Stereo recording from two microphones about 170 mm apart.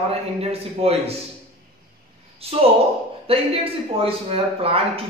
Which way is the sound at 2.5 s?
35° right (ahead or behind).